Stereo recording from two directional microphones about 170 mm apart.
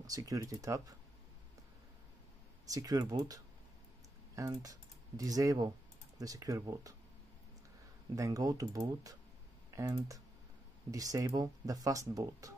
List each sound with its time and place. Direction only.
0.0 s speech: 20° right (ahead or behind)
2.7 s speech: 20° right (ahead or behind)
4.4 s speech: 20° right (ahead or behind)
8.2 s speech: 20° right (ahead or behind)